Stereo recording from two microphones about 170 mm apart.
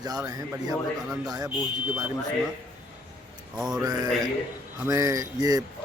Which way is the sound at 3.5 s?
Centre (ahead or behind).